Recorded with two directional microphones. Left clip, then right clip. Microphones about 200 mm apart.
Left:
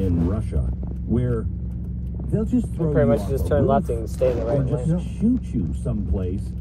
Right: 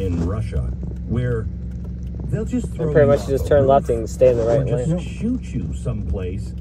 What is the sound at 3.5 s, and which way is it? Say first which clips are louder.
Speech: right 6 dB; 40° right (ahead or behind).